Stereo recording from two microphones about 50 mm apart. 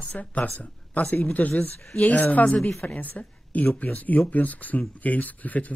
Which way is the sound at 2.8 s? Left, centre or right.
Left.